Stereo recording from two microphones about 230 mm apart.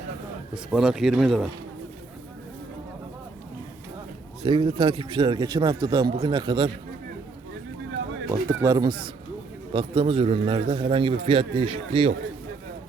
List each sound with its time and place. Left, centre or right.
0.5 s speech: centre
4.4 s a man's voice: right
8.3 s a man's voice: centre